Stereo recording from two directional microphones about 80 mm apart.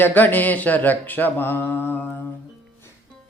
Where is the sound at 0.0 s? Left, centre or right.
Left.